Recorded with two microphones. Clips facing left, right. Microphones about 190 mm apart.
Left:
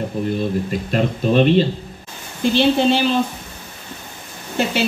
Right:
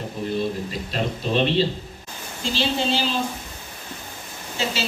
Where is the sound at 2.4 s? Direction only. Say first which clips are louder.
Left 9 dB; 60° left (ahead or behind).